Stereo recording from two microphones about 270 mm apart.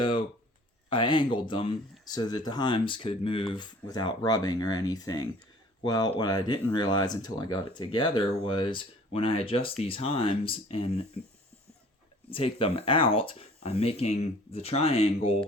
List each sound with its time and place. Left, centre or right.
0.0 s a sound: centre
0.9 s speech: centre
12.3 s speech: left